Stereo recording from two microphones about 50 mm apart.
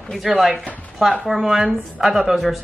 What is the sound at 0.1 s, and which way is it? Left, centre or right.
Speech, centre.